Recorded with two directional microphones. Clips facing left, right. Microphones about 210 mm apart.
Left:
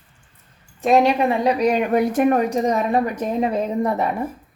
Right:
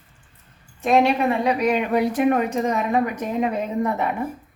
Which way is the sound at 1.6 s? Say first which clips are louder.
Left 2 dB; 40° left (ahead or behind).